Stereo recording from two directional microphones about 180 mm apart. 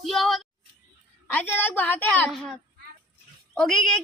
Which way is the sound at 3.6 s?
Centre (ahead or behind).